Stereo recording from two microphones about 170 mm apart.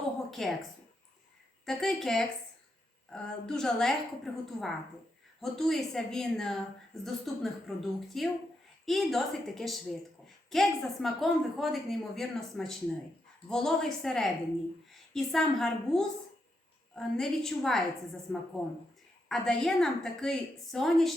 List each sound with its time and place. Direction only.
0.3 s a woman's voice: centre (ahead or behind)
1.6 s a woman's voice: centre (ahead or behind)